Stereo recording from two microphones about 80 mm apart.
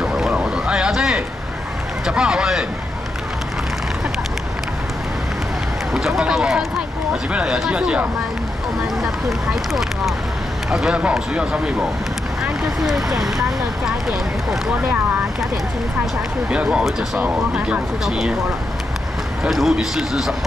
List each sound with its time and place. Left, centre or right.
0.0 s a sound: centre
2.0 s speech: centre
5.9 s speech: centre
10.7 s speech: centre
12.8 s a man's voice: centre
14.7 s speech: centre
16.4 s speech: centre
18.0 s a man's voice: centre
19.5 s a man's voice: centre